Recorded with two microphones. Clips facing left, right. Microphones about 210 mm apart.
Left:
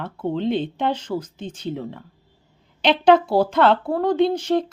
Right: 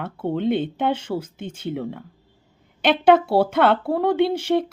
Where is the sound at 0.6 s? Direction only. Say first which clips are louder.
Right 1 dB; 5° right (ahead or behind).